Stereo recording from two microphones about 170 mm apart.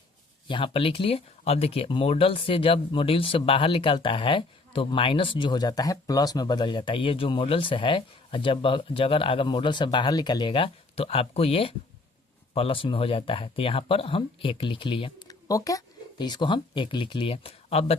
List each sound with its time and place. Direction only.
0.4 s speech: 30° left (ahead or behind)